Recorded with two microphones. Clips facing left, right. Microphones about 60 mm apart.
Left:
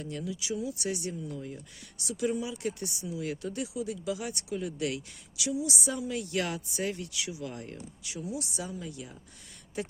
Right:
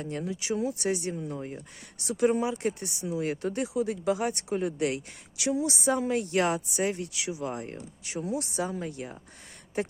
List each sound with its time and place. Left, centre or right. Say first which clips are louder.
0.0 s speech: right 3 dB; right